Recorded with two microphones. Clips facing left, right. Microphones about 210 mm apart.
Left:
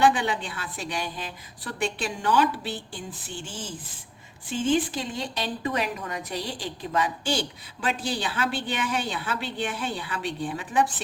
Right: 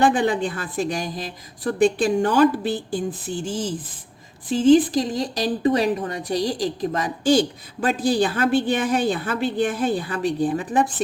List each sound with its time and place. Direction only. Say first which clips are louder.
0.0 s a woman's voice: right 4 dB; 45° right (ahead or behind)